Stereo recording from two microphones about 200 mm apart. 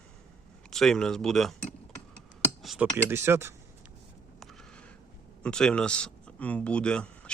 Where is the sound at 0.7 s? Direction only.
Centre (ahead or behind).